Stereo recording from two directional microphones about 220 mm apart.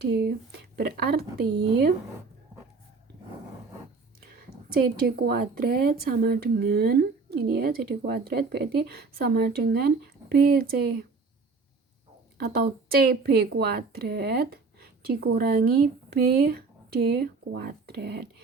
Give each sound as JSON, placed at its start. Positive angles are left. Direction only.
{"t": 0.0, "sound": "speech", "side_deg": -50}
{"t": 1.5, "sound": "speech", "side_deg": -20}
{"t": 4.7, "sound": "speech", "side_deg": -45}
{"t": 12.4, "sound": "speech", "side_deg": -45}